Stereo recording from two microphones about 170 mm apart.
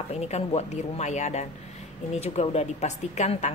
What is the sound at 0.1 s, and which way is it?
A woman's voice, 40° left (ahead or behind).